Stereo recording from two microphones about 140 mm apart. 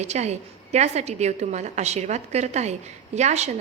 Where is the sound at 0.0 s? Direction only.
50° right (ahead or behind).